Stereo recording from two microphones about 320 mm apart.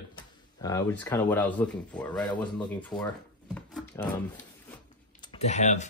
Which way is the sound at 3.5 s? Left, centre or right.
Centre.